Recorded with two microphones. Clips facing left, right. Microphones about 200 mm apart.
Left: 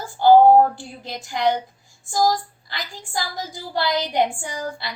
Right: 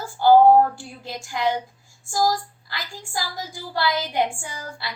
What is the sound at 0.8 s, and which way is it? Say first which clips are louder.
A woman's voice: left 1 dB; 20° left (ahead or behind).